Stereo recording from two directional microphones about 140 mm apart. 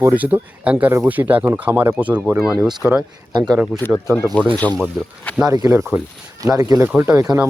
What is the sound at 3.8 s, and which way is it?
Speech, 15° left (ahead or behind).